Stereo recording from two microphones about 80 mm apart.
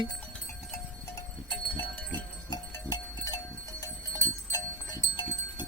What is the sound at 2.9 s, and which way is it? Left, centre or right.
Livestock, left.